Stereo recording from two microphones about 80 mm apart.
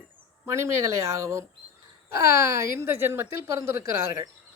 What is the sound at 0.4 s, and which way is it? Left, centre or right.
Speech, right.